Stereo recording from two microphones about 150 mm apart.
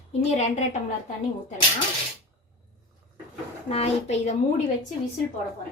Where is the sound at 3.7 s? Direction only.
45° left (ahead or behind).